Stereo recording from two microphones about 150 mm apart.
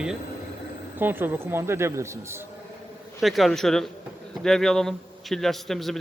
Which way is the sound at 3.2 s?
Centre (ahead or behind).